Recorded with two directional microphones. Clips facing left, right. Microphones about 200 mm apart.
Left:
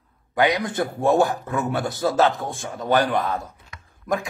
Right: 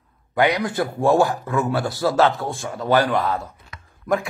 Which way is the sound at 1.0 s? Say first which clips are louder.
Right 1 dB; 20° left (ahead or behind).